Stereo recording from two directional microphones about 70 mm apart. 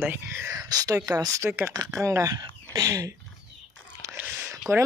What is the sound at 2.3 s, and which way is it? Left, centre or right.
Speech, right.